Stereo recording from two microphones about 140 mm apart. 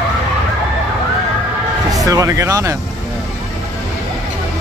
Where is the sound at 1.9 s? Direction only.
25° right (ahead or behind).